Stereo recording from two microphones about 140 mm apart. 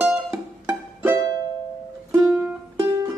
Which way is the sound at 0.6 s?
15° right (ahead or behind).